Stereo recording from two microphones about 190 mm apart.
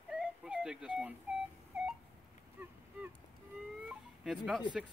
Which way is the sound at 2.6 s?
10° right (ahead or behind).